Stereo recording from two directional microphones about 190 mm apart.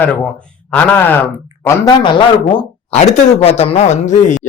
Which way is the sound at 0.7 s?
10° left (ahead or behind).